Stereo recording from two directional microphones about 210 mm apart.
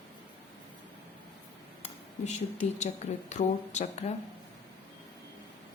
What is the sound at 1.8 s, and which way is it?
Speech, 35° left (ahead or behind).